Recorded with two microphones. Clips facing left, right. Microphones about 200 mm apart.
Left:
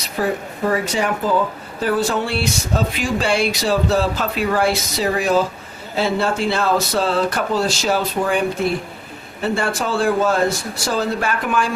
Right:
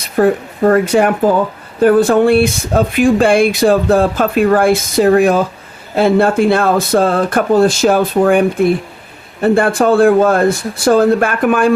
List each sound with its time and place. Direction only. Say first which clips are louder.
0.0 s speech: right 9 dB; 55° right (ahead or behind)